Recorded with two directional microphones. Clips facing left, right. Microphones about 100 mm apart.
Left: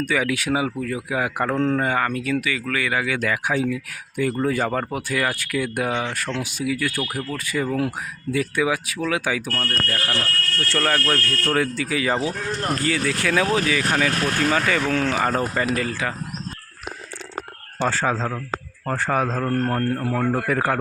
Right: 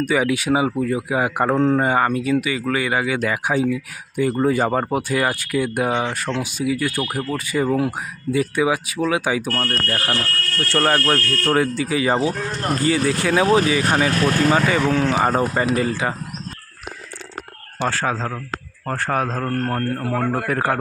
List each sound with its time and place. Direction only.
0.1 s a man's voice: 25° right (ahead or behind)
17.7 s a man's voice: 10° right (ahead or behind)